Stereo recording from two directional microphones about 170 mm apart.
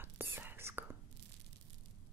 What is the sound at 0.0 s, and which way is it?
Whispering, 15° right (ahead or behind).